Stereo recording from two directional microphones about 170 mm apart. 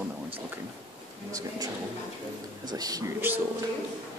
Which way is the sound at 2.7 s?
20° right (ahead or behind).